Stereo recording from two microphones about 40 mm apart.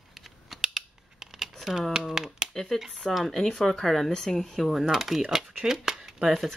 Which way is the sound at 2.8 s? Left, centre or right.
Centre.